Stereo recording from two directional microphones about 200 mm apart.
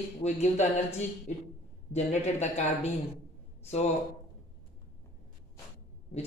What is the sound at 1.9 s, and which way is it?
A woman's voice, 35° left (ahead or behind).